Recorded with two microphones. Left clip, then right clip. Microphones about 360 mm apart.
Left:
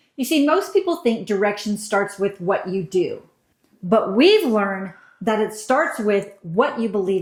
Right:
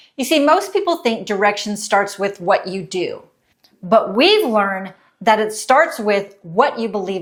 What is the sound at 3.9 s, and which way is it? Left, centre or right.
A woman's voice, right.